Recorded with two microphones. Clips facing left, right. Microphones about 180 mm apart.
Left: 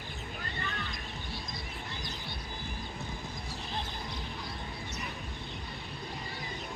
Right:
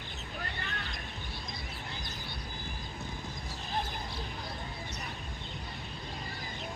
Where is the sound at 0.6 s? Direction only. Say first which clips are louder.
Left 2 dB; 60° right (ahead or behind).